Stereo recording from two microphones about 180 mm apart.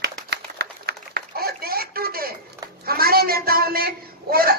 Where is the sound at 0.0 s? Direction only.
65° right (ahead or behind).